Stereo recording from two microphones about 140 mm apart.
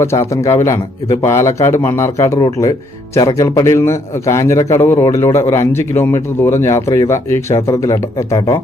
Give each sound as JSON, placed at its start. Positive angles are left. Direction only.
{"t": 0.0, "sound": "speech", "side_deg": 20}